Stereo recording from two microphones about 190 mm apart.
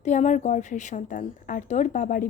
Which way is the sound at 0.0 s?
40° left (ahead or behind).